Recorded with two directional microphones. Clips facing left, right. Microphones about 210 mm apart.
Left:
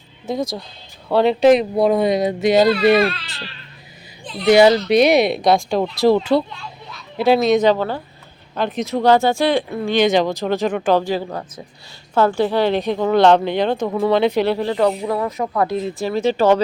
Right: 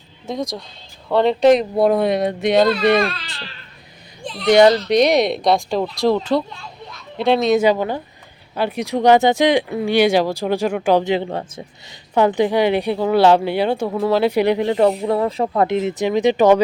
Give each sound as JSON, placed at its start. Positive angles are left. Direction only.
{"t": 0.3, "sound": "speech", "side_deg": 0}
{"t": 4.4, "sound": "speech", "side_deg": 5}
{"t": 7.6, "sound": "a woman's voice", "side_deg": -15}
{"t": 12.1, "sound": "a woman's voice", "side_deg": -15}